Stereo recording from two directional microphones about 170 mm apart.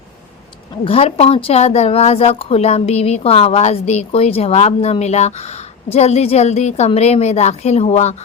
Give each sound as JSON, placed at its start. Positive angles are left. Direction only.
{"t": 0.9, "sound": "speech", "side_deg": 35}